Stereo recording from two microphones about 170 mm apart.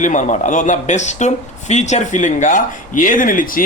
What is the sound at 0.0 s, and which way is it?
Speech, 45° left (ahead or behind).